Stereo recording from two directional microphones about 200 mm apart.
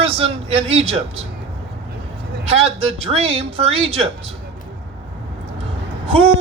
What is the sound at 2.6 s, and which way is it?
Speech, 30° right (ahead or behind).